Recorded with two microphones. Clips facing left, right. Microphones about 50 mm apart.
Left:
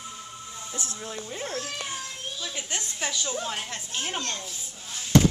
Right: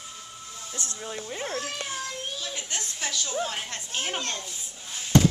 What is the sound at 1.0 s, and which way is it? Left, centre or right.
Speech, centre.